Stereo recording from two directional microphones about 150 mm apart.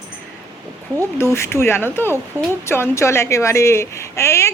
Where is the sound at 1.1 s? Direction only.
20° left (ahead or behind).